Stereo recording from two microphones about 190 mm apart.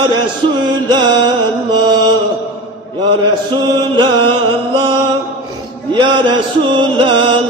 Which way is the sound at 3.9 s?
25° right (ahead or behind).